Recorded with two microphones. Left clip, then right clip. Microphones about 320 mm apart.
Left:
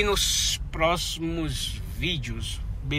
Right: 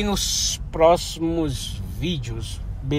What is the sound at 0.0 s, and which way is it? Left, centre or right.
Speech, centre.